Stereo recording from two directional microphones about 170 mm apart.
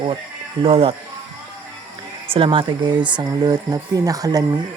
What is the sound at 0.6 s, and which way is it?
Speech, 35° right (ahead or behind).